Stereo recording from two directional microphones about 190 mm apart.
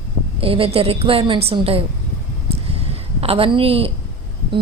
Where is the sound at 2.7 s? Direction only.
30° right (ahead or behind).